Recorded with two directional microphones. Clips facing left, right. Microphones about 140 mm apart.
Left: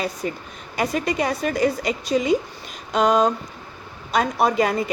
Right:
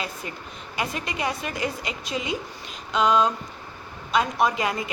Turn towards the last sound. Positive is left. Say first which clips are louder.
# left 4 dB
turn(degrees=40)  # may be behind; listen again after turning